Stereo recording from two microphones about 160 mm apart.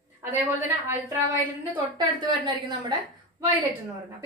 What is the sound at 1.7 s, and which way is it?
A woman's voice, 30° right (ahead or behind).